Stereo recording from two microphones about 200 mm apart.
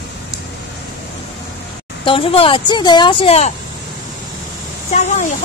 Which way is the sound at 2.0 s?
25° left (ahead or behind).